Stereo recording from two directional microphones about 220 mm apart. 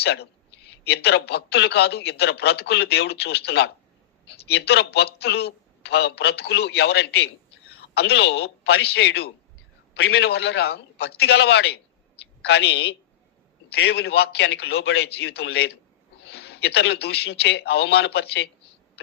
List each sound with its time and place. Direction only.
0.0 s a man's voice: 50° left (ahead or behind)